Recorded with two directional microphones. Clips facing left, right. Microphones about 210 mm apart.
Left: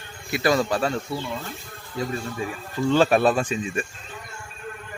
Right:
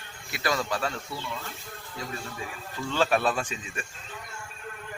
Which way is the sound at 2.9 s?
40° left (ahead or behind).